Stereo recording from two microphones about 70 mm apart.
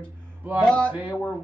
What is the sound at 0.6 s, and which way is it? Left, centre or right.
Speech, centre.